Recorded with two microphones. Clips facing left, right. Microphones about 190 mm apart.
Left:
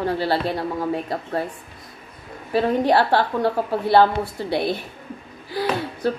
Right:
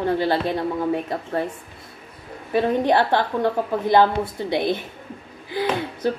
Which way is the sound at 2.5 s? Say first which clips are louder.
Even; 20° right (ahead or behind).